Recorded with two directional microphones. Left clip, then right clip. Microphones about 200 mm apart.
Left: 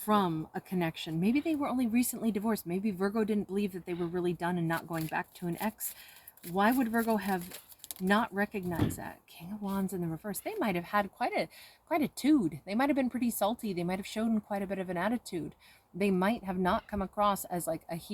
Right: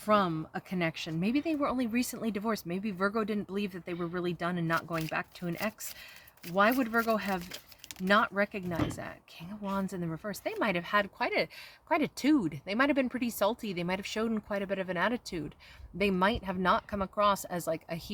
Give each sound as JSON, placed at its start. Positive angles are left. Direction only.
{"t": 0.0, "sound": "speech", "side_deg": -25}